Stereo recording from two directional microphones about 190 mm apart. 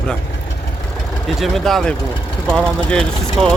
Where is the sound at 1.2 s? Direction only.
Centre (ahead or behind).